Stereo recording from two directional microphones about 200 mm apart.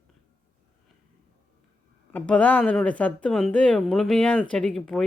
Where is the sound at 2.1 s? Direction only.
5° left (ahead or behind).